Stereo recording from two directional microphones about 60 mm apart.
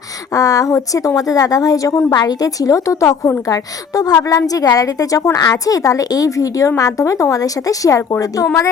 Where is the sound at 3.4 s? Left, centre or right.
Left.